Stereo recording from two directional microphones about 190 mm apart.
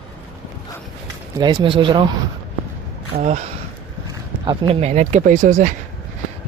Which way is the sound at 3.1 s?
40° right (ahead or behind).